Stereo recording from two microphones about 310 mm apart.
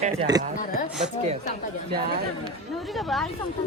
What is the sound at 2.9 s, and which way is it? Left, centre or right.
Speech, centre.